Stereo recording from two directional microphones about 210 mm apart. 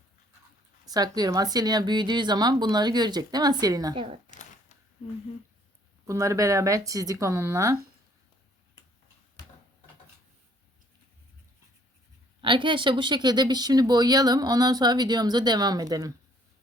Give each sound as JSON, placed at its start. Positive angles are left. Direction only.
{"t": 0.9, "sound": "speech", "side_deg": -20}
{"t": 6.1, "sound": "speech", "side_deg": -15}
{"t": 12.4, "sound": "speech", "side_deg": -25}